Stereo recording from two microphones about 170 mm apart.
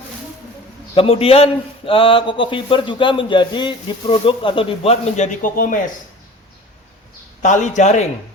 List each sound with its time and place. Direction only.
0.9 s speech: 35° left (ahead or behind); by 5.8 s 50° left (ahead or behind)
7.4 s a man's voice: 45° left (ahead or behind)